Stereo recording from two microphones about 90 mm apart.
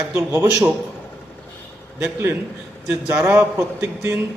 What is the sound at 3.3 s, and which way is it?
Speech, 25° right (ahead or behind).